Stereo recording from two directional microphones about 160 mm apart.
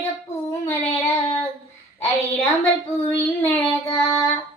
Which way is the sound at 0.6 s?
15° left (ahead or behind).